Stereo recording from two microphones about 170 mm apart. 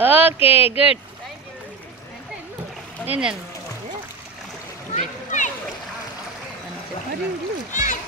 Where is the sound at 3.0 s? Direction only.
5° right (ahead or behind).